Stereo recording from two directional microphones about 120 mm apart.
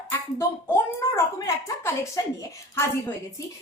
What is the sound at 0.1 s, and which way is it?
Speech, 20° left (ahead or behind).